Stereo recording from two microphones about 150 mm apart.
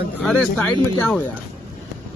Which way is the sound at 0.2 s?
5° left (ahead or behind).